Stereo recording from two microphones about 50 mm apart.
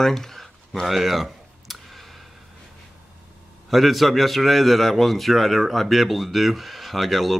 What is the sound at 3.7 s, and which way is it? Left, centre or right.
A man's voice, centre.